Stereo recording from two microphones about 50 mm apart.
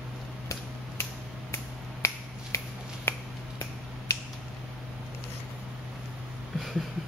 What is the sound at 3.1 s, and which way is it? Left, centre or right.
Finger snapping, left.